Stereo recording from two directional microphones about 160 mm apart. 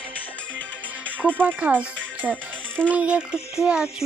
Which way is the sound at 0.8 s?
10° right (ahead or behind).